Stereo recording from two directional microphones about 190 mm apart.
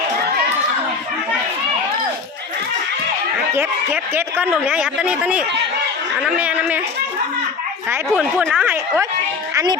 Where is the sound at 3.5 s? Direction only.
10° right (ahead or behind).